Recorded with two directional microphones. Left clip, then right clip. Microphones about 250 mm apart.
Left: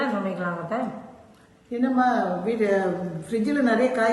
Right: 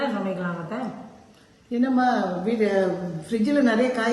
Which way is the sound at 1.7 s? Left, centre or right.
Right.